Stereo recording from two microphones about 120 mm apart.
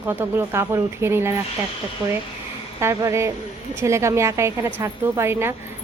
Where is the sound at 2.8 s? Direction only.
25° right (ahead or behind).